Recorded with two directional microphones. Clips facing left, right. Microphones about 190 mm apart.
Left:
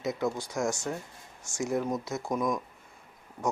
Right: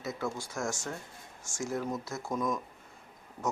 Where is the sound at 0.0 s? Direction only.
15° left (ahead or behind).